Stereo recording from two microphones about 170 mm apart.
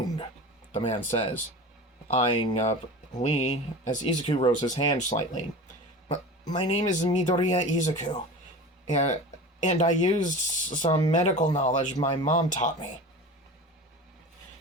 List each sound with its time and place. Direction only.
0.7 s speech: 35° left (ahead or behind)
3.2 s speech: 45° left (ahead or behind)